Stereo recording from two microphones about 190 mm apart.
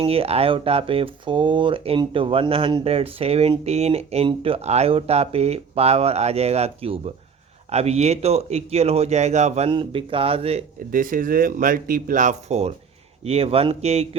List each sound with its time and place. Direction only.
0.0 s speech: 30° right (ahead or behind)
10.9 s speech: 45° right (ahead or behind)